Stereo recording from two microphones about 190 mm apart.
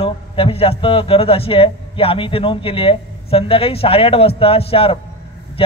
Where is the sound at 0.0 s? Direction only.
30° left (ahead or behind).